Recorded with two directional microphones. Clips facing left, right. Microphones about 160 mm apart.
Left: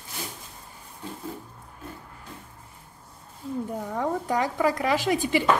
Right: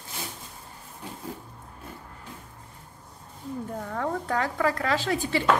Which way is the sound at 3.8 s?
10° left (ahead or behind).